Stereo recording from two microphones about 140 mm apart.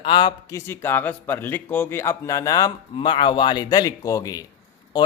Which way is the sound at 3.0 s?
35° left (ahead or behind).